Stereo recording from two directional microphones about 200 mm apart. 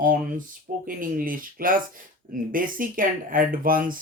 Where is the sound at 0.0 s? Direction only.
40° right (ahead or behind).